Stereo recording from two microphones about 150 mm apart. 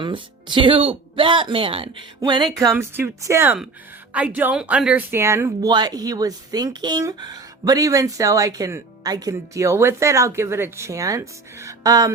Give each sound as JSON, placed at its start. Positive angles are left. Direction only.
{"t": 0.0, "sound": "speech", "side_deg": -35}